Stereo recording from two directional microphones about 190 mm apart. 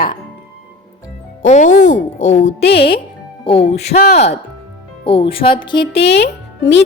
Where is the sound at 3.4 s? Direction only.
30° left (ahead or behind).